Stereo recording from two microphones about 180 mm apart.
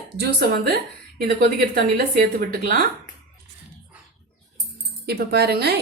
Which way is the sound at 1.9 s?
60° right (ahead or behind).